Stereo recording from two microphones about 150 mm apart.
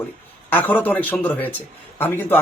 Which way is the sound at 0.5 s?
10° left (ahead or behind).